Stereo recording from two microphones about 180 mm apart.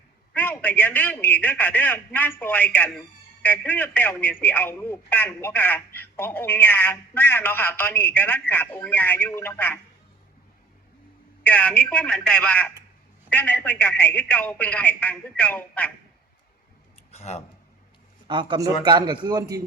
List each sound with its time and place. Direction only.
0.3 s a man's voice: 10° left (ahead or behind)
11.4 s a man's voice: 5° left (ahead or behind)
17.1 s speech: 35° left (ahead or behind)
18.3 s a man's voice: 25° right (ahead or behind)